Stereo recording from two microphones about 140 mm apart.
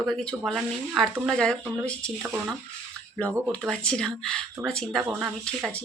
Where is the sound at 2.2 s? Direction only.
15° right (ahead or behind).